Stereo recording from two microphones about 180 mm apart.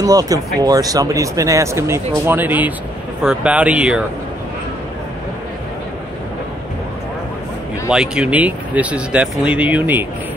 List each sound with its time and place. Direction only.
0.0 s speech: 20° right (ahead or behind)
7.9 s speech: 5° right (ahead or behind)